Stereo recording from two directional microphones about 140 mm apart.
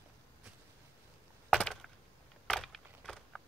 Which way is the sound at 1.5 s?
5° left (ahead or behind).